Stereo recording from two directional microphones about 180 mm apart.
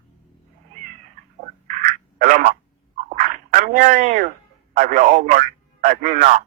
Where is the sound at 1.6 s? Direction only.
45° right (ahead or behind).